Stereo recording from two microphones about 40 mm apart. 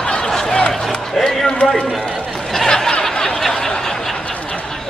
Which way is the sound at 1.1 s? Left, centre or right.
Centre.